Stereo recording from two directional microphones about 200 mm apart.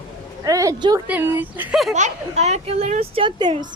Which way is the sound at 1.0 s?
10° right (ahead or behind).